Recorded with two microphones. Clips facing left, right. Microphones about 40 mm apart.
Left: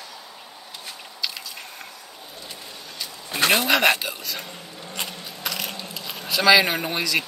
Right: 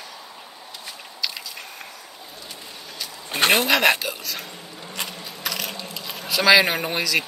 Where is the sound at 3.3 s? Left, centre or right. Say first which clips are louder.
Right 1 dB; right.